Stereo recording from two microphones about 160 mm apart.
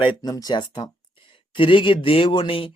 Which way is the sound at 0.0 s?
25° left (ahead or behind).